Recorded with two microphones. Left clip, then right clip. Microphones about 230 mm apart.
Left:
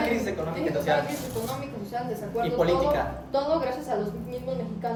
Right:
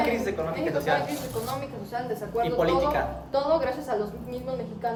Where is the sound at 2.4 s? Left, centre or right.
Centre.